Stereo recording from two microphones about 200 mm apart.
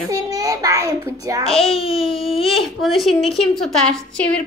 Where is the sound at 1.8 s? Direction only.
30° left (ahead or behind).